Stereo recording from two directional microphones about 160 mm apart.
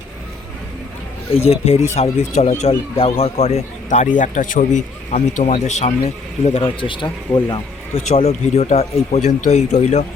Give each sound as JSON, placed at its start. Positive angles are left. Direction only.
{"t": 1.3, "sound": "a man's voice", "side_deg": 40}
{"t": 6.4, "sound": "speech", "side_deg": 35}
{"t": 8.0, "sound": "a man's voice", "side_deg": 40}